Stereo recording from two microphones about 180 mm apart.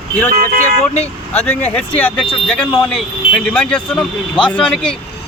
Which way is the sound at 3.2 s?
30° left (ahead or behind).